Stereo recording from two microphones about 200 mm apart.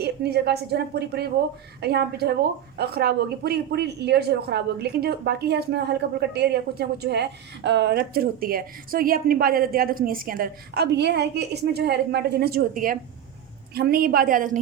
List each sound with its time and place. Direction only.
0.0 s a woman's voice: 55° right (ahead or behind)